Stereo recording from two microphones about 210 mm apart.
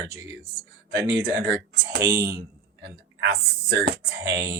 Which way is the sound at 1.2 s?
50° right (ahead or behind).